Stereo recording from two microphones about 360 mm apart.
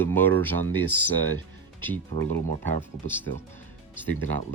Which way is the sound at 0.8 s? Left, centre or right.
Right.